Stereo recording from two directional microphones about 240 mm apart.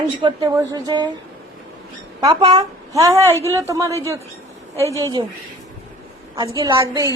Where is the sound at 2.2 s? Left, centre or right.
Centre.